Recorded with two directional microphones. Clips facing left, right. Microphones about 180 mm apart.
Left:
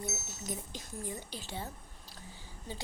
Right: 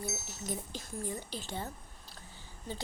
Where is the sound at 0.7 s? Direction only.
15° left (ahead or behind).